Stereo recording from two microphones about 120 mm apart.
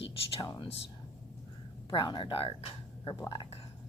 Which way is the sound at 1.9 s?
40° left (ahead or behind).